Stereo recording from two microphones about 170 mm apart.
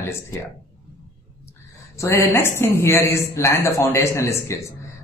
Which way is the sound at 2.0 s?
15° left (ahead or behind).